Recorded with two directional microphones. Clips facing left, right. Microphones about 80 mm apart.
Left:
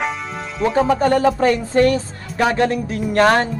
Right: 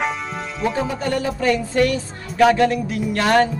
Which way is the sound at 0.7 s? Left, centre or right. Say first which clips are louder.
Left 7 dB; left.